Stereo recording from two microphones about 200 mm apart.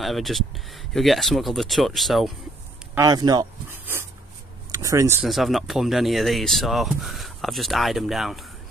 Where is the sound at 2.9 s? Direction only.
20° right (ahead or behind).